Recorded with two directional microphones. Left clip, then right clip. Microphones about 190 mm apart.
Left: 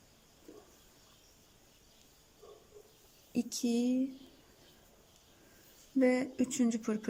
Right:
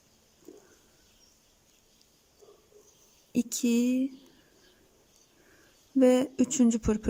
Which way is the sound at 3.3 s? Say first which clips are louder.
Right 6 dB; 15° right (ahead or behind).